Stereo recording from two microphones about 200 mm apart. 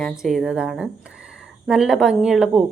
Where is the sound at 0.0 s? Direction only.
Centre (ahead or behind).